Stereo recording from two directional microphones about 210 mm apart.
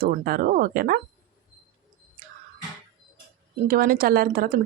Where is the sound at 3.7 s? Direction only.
45° right (ahead or behind).